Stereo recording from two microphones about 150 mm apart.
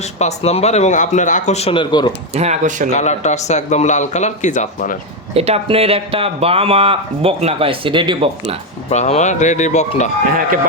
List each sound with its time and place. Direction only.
0.2 s a man's voice: 45° left (ahead or behind); by 2.1 s 30° left (ahead or behind)
2.3 s speech: 45° right (ahead or behind)
2.9 s a man's voice: 50° left (ahead or behind)
5.3 s speech: 40° right (ahead or behind)
8.9 s a man's voice: 50° left (ahead or behind)